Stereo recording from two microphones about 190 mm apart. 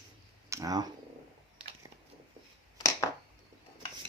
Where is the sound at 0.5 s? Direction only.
20° right (ahead or behind).